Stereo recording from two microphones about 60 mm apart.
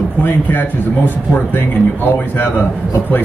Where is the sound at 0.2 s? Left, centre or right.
Left.